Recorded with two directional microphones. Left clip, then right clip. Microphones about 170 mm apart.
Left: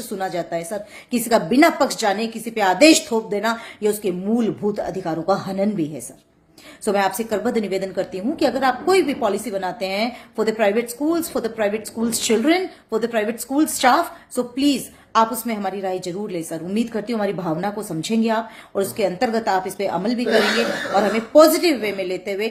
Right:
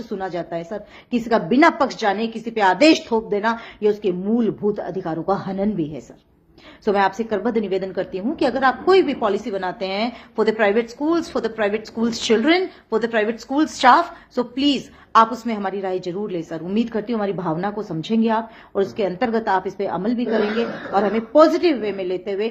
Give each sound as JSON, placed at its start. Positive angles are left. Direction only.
{"t": 0.1, "sound": "a woman's voice", "side_deg": 20}